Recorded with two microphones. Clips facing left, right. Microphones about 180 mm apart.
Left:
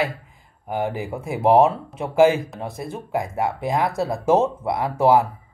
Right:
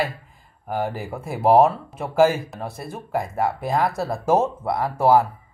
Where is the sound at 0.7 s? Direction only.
20° left (ahead or behind).